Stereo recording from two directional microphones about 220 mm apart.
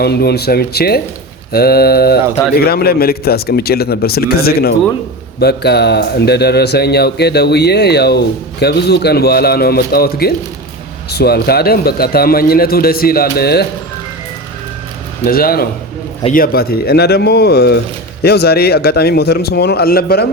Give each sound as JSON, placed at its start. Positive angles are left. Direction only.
{"t": 0.0, "sound": "speech", "side_deg": 45}
{"t": 15.2, "sound": "speech", "side_deg": 40}